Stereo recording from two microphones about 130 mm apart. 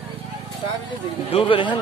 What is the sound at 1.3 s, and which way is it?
Speech, 40° left (ahead or behind).